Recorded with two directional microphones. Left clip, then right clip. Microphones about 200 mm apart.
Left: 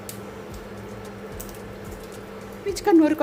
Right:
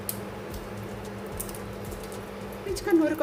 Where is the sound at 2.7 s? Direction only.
40° left (ahead or behind).